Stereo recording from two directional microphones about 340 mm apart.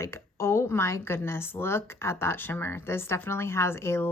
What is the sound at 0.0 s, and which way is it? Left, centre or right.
A woman's voice, centre.